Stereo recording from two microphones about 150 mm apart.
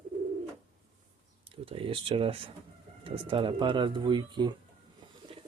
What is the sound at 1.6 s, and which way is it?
Speech, 35° right (ahead or behind).